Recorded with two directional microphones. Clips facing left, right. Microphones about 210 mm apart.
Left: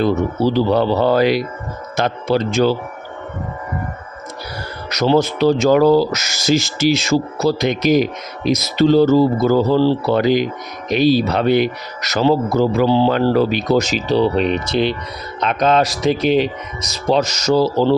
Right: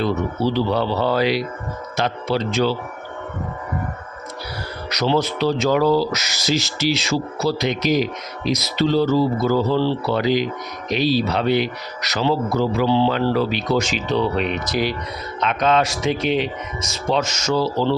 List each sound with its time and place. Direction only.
0.0 s speech: 45° left (ahead or behind)
4.9 s speech: 45° left (ahead or behind); by 14.9 s 25° left (ahead or behind)
15.4 s speech: 40° left (ahead or behind)